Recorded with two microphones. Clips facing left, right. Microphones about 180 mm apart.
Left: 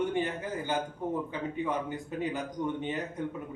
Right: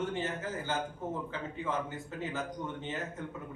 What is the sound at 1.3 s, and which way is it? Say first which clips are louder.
Speech: left 4 dB; 15° left (ahead or behind).